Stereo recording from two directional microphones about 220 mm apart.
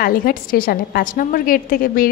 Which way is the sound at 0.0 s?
40° left (ahead or behind).